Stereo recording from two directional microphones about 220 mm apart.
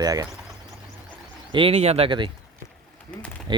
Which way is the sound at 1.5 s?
25° right (ahead or behind).